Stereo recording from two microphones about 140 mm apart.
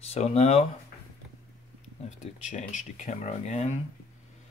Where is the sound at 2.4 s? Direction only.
60° left (ahead or behind).